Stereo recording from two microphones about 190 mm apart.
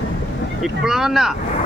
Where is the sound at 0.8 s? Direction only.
Centre (ahead or behind).